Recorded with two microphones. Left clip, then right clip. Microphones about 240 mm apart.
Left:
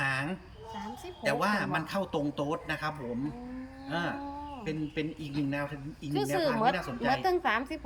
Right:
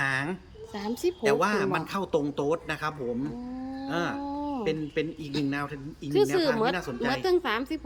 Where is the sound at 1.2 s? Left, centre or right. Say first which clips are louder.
Right 3 dB; centre.